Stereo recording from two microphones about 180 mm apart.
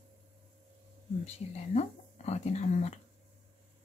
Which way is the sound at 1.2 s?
40° left (ahead or behind).